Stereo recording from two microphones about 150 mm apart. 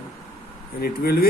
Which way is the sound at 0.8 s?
85° left.